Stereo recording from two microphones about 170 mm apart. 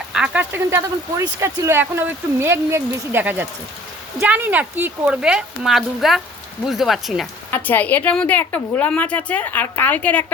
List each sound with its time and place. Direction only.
0.1 s speech: 5° right (ahead or behind)
7.5 s a woman's voice: 10° left (ahead or behind)